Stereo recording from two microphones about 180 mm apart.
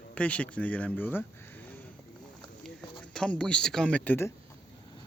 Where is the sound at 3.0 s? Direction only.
5° left (ahead or behind).